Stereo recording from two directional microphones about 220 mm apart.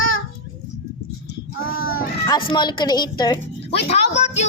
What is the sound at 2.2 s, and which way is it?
A woman's voice, 20° left (ahead or behind).